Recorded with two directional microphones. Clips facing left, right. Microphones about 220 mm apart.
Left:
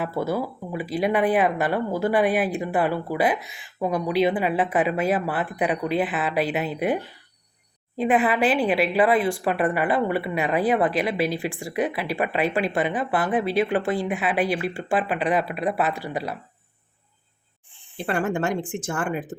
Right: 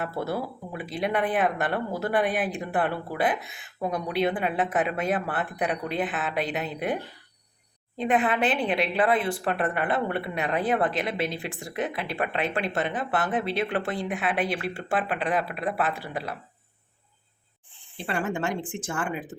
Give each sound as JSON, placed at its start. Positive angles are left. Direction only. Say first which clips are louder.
{"t": 0.0, "sound": "speech", "louder": "left 4 dB", "side_deg": 0}
{"t": 3.4, "sound": "speech", "louder": "left 1 dB", "side_deg": -55}
{"t": 3.8, "sound": "speech", "louder": "left 4 dB", "side_deg": 5}
{"t": 18.0, "sound": "speech", "louder": "left 4 dB", "side_deg": 50}